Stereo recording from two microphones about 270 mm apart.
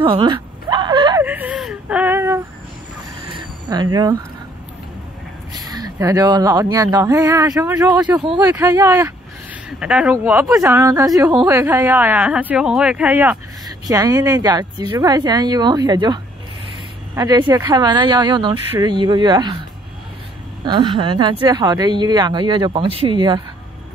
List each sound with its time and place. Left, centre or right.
0.0 s whimper: centre
3.3 s a sound: centre
5.5 s speech: centre
20.6 s speech: centre